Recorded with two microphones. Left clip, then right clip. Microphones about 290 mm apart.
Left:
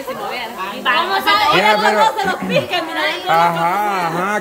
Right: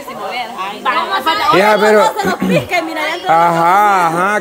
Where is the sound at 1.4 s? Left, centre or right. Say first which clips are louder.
Right 6 dB; centre.